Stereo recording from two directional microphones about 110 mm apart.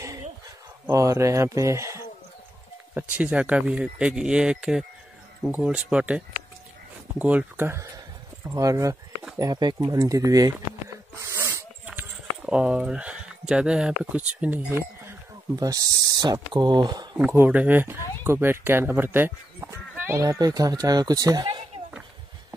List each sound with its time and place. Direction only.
0.8 s speech: 25° right (ahead or behind)
2.9 s speech: 10° right (ahead or behind); by 10.5 s 35° right (ahead or behind)
11.1 s sneeze: 25° right (ahead or behind)
11.8 s speech: 10° right (ahead or behind)
14.7 s a sound: 25° right (ahead or behind)
15.6 s speech: 35° right (ahead or behind)
17.3 s speech: 15° right (ahead or behind)
20.2 s speech: 35° right (ahead or behind)